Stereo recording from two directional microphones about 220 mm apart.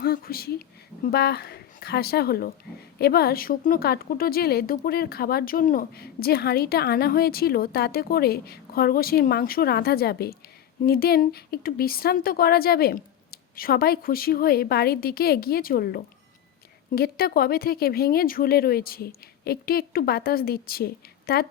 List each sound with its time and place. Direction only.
0.0 s a woman's voice: 45° left (ahead or behind)